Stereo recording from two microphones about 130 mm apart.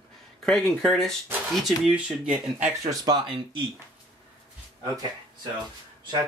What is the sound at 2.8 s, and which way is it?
Speech, 30° right (ahead or behind).